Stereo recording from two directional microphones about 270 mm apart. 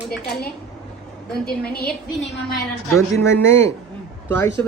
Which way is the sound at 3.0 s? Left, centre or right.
Centre.